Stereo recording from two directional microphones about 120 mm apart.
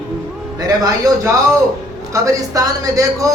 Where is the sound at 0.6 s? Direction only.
30° right (ahead or behind).